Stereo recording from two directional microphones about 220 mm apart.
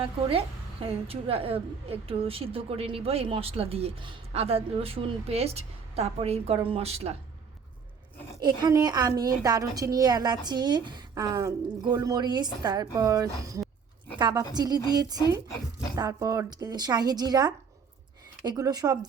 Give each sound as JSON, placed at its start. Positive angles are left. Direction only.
{"t": 0.0, "sound": "a woman's voice", "side_deg": -25}
{"t": 8.4, "sound": "a woman's voice", "side_deg": -20}